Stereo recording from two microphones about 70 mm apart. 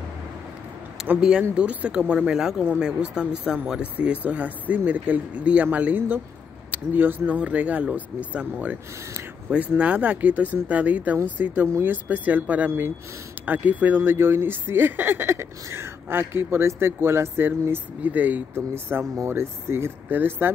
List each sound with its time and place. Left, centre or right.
1.0 s a sound: centre
1.5 s speech: centre
9.8 s speech: centre